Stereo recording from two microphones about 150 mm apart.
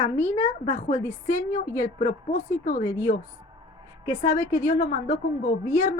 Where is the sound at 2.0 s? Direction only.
60° left (ahead or behind).